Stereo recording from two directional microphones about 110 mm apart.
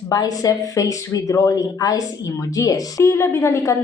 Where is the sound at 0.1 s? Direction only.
35° left (ahead or behind).